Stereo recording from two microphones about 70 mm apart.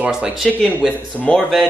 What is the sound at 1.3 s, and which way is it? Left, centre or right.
Speech, centre.